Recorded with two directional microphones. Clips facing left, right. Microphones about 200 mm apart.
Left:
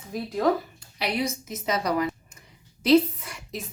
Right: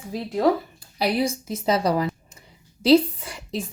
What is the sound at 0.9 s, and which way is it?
A woman's voice, 35° right (ahead or behind).